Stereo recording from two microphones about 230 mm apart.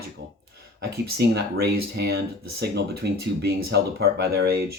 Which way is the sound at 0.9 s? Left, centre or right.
Right.